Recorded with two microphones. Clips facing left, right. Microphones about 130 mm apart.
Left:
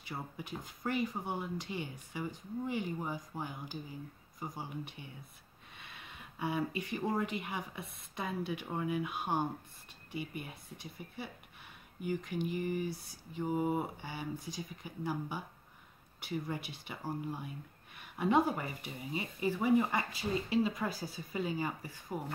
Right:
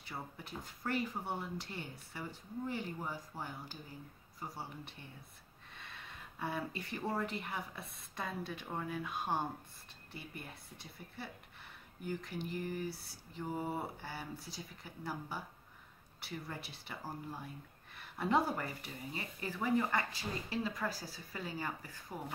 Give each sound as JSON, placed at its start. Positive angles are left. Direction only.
{"t": 0.1, "sound": "speech", "side_deg": 10}
{"t": 5.8, "sound": "a sound", "side_deg": 10}
{"t": 7.2, "sound": "speech", "side_deg": 10}